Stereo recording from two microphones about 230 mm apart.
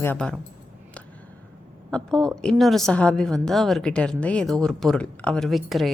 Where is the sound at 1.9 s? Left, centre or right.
Centre.